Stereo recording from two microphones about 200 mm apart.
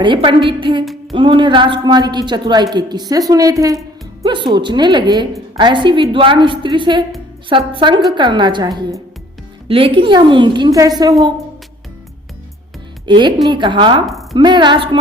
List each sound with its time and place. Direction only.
0.0 s a woman's voice: 25° right (ahead or behind)
13.1 s a woman's voice: 25° right (ahead or behind)